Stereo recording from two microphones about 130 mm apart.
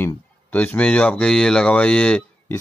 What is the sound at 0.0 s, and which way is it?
Speech, 10° left (ahead or behind).